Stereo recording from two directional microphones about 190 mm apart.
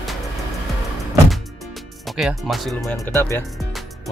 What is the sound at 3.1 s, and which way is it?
Speech, 10° left (ahead or behind).